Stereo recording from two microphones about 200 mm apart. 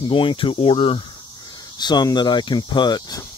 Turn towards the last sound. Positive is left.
turn(degrees=20)  # may be behind; listen again after turning